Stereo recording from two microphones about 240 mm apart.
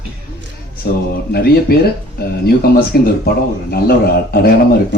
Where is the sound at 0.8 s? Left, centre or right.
Left.